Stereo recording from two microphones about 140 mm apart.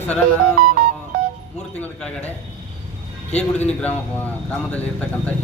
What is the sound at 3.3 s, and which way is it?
Speech, 50° left (ahead or behind).